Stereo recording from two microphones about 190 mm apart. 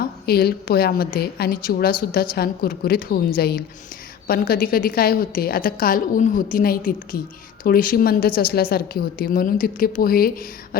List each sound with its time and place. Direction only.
0.0 s a woman's voice: 55° left (ahead or behind)